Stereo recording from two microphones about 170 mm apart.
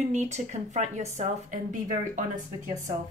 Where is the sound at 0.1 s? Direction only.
40° right (ahead or behind).